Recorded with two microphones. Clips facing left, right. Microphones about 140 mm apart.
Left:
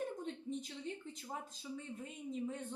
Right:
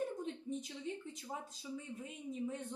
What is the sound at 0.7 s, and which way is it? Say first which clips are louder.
Speech: right 1 dB; 10° right (ahead or behind).